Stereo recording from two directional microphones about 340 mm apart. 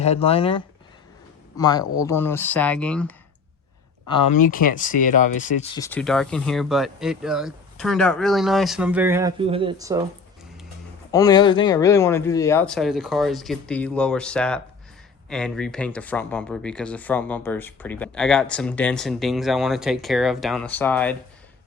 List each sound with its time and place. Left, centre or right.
0.0 s speech: centre
4.1 s speech: left; by 10.1 s centre
11.1 s speech: centre